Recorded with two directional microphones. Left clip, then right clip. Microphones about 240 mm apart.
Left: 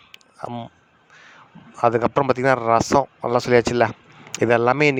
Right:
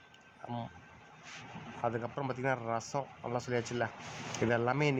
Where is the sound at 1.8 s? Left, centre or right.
Left.